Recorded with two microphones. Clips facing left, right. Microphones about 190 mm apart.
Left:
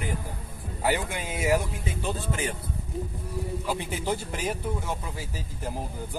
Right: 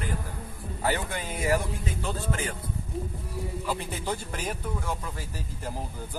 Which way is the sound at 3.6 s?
10° left (ahead or behind).